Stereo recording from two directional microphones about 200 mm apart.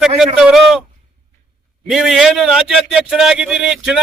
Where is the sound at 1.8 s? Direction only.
Centre (ahead or behind).